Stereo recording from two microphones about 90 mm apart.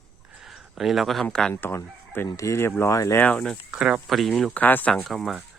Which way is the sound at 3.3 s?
5° left (ahead or behind).